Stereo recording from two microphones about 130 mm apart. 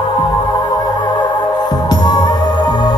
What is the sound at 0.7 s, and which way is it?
Music, 30° left (ahead or behind).